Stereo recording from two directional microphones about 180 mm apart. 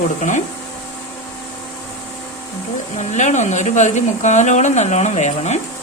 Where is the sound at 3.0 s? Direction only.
40° left (ahead or behind).